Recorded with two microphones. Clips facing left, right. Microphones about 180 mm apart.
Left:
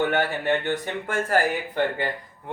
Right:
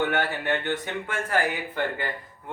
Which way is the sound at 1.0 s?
40° left (ahead or behind).